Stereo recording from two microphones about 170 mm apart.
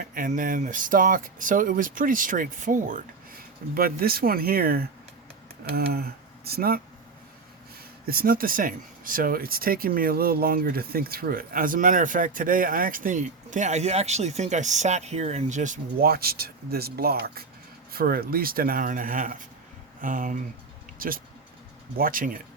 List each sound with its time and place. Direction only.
0.0 s speech: 50° right (ahead or behind)
3.8 s speech: 60° right (ahead or behind)
8.0 s speech: 60° right (ahead or behind)